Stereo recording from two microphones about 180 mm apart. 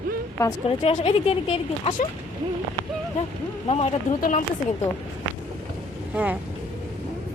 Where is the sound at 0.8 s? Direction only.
35° left (ahead or behind).